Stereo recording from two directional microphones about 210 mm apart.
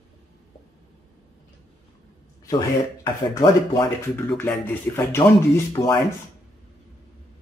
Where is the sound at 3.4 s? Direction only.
15° left (ahead or behind).